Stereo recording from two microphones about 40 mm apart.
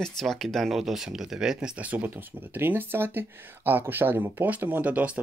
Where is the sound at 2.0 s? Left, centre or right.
Right.